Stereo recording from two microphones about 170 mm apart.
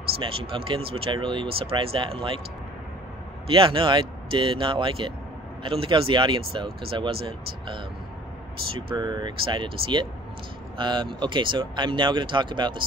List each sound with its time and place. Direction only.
0.2 s speech: 30° right (ahead or behind)
3.4 s speech: 30° right (ahead or behind)
8.9 s speech: 25° right (ahead or behind)